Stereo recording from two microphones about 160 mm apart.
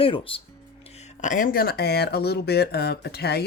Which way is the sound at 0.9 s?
45° left (ahead or behind).